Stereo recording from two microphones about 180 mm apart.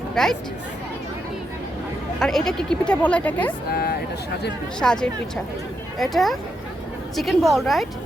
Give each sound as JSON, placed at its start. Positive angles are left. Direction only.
{"t": 0.1, "sound": "speech", "side_deg": 0}
{"t": 2.1, "sound": "speech", "side_deg": 5}
{"t": 3.7, "sound": "vehicle", "side_deg": 55}
{"t": 4.8, "sound": "speech", "side_deg": 5}